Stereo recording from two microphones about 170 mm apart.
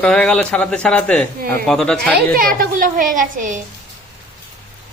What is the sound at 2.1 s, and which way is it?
A woman's voice, 60° right (ahead or behind).